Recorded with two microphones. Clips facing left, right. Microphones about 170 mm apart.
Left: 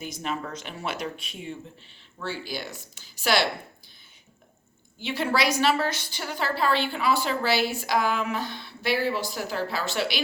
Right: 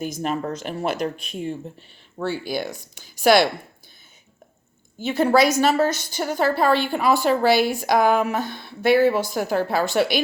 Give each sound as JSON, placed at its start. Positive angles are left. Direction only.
{"t": 0.0, "sound": "a woman's voice", "side_deg": -45}
{"t": 2.1, "sound": "a woman's voice", "side_deg": -50}
{"t": 4.9, "sound": "a woman's voice", "side_deg": -45}